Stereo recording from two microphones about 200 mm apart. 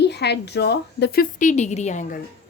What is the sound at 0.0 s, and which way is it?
A woman's voice, 55° left (ahead or behind).